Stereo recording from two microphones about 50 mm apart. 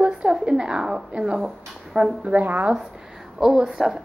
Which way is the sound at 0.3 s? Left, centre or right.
Centre.